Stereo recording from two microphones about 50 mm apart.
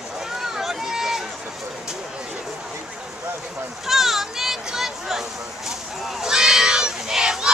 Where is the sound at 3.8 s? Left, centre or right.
Centre.